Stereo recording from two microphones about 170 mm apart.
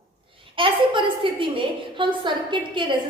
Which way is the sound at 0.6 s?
30° right (ahead or behind).